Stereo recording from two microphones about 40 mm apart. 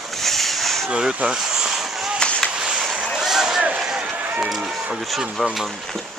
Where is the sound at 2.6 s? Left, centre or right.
Centre.